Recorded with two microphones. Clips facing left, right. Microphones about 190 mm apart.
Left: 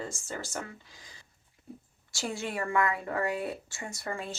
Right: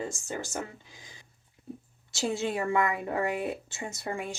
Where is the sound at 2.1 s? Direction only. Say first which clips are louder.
Right 5 dB; 20° right (ahead or behind).